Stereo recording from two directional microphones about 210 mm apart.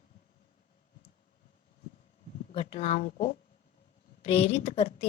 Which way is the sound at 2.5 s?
25° left (ahead or behind).